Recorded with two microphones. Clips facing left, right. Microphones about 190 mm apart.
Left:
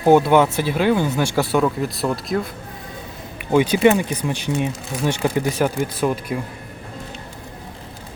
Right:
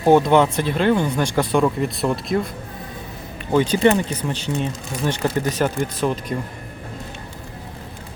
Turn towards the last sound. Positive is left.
turn(degrees=10)  # may be behind; listen again after turning